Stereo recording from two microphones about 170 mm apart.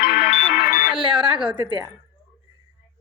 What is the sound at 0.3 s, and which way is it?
Music, 60° left (ahead or behind).